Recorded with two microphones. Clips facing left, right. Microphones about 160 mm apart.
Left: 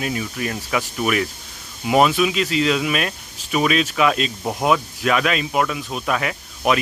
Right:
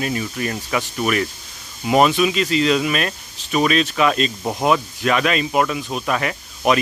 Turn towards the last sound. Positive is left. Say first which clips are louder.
# right 1 dB
turn(degrees=0)  # may be behind; listen again after turning